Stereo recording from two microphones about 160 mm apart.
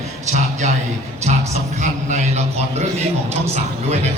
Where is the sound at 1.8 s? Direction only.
45° right (ahead or behind).